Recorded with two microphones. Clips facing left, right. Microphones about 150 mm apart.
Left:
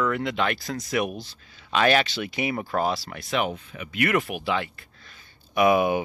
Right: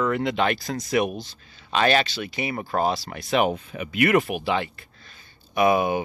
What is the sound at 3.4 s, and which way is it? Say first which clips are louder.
Speech: right 5 dB; 50° right (ahead or behind).